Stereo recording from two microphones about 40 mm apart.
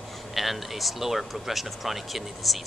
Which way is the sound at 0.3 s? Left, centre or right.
Centre.